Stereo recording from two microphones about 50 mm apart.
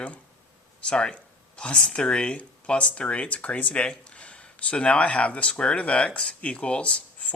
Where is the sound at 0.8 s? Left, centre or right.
Centre.